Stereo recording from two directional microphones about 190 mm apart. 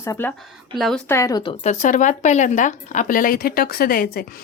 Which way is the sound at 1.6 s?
40° left (ahead or behind).